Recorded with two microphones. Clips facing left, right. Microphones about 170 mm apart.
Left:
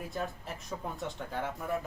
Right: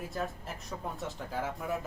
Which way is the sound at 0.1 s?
Centre (ahead or behind).